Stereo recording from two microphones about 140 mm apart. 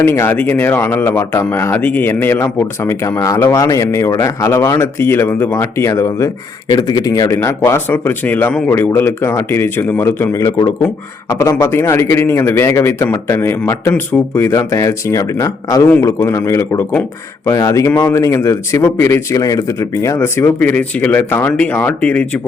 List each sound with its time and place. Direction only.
0.0 s a man's voice: 20° left (ahead or behind)